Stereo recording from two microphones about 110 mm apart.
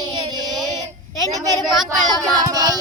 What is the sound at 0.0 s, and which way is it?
Child singing, 40° right (ahead or behind).